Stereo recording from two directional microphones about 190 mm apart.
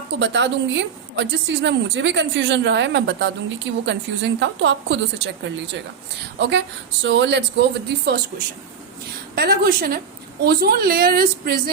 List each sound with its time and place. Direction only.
0.1 s a woman's voice: 70° right (ahead or behind)
7.0 s a woman's voice: 70° right (ahead or behind)
9.3 s a woman's voice: 55° right (ahead or behind)